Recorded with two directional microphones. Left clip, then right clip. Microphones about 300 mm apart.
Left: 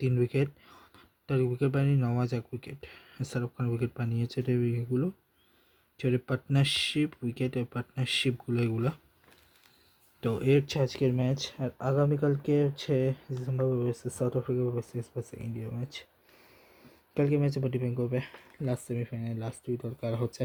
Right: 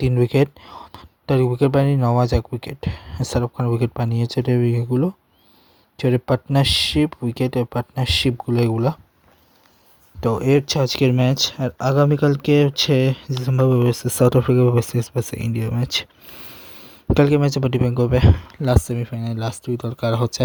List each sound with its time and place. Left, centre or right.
0.0 s speech: right
10.2 s speech: centre